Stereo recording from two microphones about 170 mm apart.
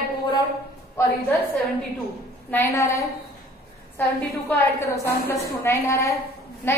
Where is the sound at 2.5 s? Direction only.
15° left (ahead or behind).